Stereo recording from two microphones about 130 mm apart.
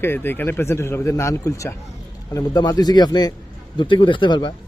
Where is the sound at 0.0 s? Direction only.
15° left (ahead or behind).